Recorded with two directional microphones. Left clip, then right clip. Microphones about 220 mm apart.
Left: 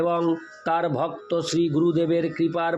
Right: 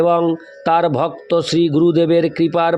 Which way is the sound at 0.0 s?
35° right (ahead or behind).